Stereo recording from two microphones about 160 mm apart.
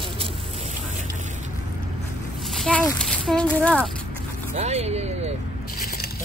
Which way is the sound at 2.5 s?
5° left (ahead or behind).